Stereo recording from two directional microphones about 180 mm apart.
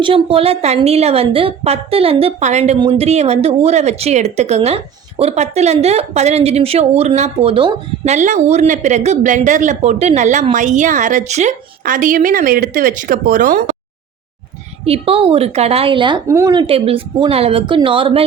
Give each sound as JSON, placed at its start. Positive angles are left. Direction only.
{"t": 0.0, "sound": "a woman's voice", "side_deg": -30}
{"t": 14.8, "sound": "speech", "side_deg": -35}